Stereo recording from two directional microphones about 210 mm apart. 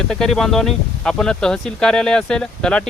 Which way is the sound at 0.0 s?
5° left (ahead or behind).